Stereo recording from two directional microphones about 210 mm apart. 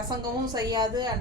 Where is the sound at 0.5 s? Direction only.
20° right (ahead or behind).